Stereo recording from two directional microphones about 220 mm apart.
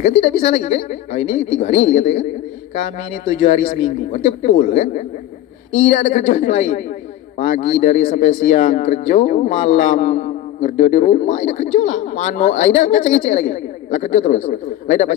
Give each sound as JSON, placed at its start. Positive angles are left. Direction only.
{"t": 0.0, "sound": "speech", "side_deg": 30}
{"t": 3.3, "sound": "speech", "side_deg": 30}